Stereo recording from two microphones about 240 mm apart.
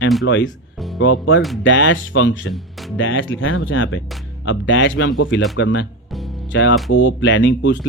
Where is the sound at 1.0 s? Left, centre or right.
Left.